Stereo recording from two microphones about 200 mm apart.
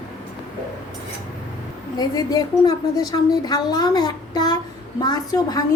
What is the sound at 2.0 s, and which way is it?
A woman's voice, 20° left (ahead or behind).